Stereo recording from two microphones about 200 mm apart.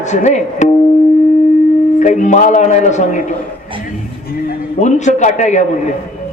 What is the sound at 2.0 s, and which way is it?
Speech, 35° left (ahead or behind).